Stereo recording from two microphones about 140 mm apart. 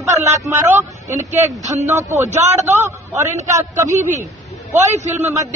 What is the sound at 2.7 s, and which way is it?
Speech, 20° right (ahead or behind).